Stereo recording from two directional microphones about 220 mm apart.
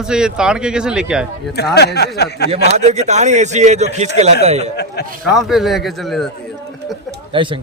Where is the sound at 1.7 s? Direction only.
50° left (ahead or behind).